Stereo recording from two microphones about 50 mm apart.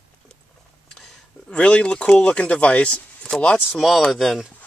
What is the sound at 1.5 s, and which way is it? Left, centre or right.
Speech, left.